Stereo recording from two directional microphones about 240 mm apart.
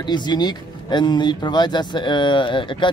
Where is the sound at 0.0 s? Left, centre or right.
Centre.